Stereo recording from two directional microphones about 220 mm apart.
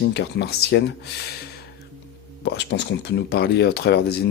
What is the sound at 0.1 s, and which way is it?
Speech, 50° left (ahead or behind).